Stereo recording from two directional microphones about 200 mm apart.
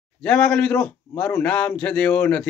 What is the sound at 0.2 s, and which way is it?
A man's voice, 5° left (ahead or behind).